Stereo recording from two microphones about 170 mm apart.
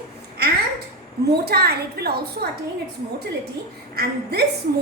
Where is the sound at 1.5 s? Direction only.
70° right (ahead or behind).